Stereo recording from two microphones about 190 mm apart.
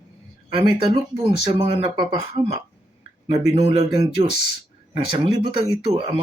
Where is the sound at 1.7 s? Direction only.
20° right (ahead or behind).